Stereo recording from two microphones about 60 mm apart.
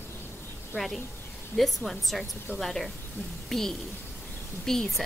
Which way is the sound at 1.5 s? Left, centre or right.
Centre.